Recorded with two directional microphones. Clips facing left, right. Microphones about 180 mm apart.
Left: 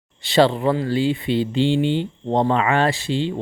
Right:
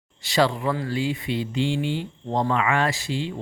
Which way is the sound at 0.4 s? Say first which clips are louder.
Left 5 dB; 30° left (ahead or behind).